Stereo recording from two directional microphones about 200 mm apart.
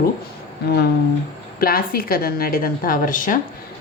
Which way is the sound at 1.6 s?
50° left (ahead or behind).